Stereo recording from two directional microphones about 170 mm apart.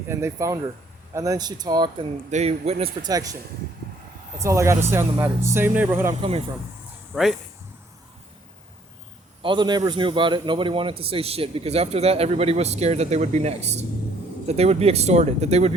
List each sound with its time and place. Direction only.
0.1 s speech: 15° right (ahead or behind)
2.3 s a man's voice: 40° right (ahead or behind)
3.0 s speech: 20° right (ahead or behind)
4.4 s speech: 15° right (ahead or behind)
7.1 s speech: centre (ahead or behind)
9.4 s a man's voice: 30° right (ahead or behind)